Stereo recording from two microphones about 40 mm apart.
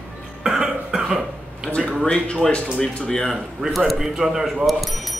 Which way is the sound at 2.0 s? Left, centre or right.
Centre.